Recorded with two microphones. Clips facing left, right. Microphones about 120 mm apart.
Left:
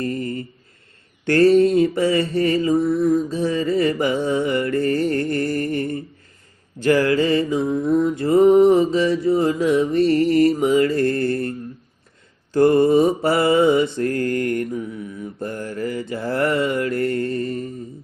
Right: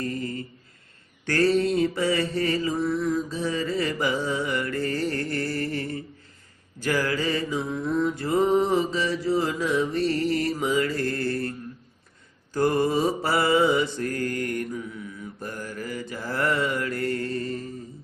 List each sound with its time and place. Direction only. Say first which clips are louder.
0.0 s mantra: left 5 dB; 55° left (ahead or behind)
12.5 s mantra: left 8 dB; 55° left (ahead or behind)